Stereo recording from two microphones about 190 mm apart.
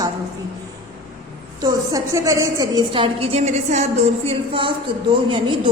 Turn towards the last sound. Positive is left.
turn(degrees=-25)  # may be behind; listen again after turning